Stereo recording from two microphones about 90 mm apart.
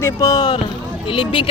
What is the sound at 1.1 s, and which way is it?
Speech, 75° left (ahead or behind).